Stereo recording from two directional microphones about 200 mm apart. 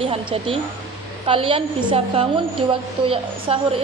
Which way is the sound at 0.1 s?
25° right (ahead or behind).